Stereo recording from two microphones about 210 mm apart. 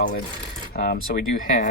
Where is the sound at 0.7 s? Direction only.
45° left (ahead or behind).